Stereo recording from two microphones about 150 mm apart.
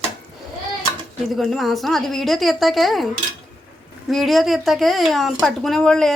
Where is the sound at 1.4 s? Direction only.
Centre (ahead or behind).